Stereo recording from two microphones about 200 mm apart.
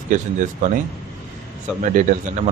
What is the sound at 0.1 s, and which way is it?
Speech, 40° right (ahead or behind).